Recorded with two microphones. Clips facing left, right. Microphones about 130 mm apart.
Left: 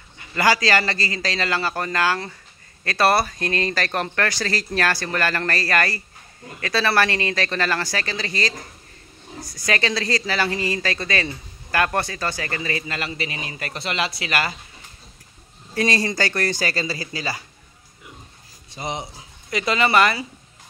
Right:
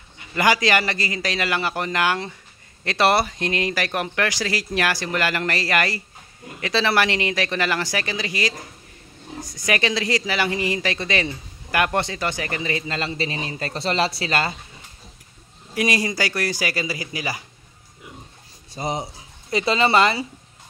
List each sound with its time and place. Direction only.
0.2 s speech: 20° right (ahead or behind)
15.7 s speech: 15° right (ahead or behind)
18.8 s speech: 35° right (ahead or behind)